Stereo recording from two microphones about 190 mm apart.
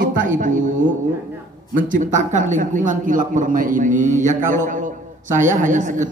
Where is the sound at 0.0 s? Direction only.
45° right (ahead or behind).